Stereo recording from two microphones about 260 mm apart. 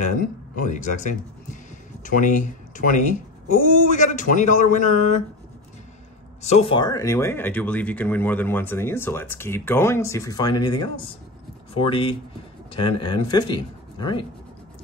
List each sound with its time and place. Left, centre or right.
0.7 s speech: left
3.5 s speech: left
6.4 s speech: left